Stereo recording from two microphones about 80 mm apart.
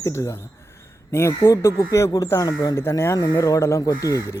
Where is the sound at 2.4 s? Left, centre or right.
Left.